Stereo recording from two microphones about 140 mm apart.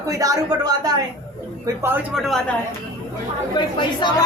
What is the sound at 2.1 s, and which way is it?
Speech, centre (ahead or behind).